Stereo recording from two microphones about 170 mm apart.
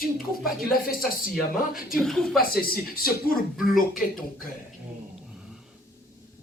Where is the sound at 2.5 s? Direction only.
60° left (ahead or behind).